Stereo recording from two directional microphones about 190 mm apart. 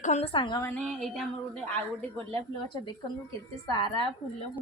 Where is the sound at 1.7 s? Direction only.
10° left (ahead or behind).